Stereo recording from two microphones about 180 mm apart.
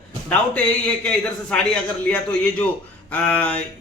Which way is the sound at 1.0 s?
5° left (ahead or behind).